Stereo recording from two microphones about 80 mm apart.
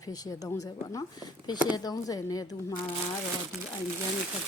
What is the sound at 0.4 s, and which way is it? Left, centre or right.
Speech, left.